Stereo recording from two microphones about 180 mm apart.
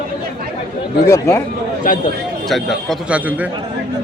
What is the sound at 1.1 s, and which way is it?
Speech, 15° left (ahead or behind).